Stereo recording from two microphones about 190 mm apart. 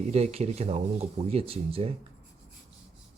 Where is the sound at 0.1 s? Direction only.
35° right (ahead or behind).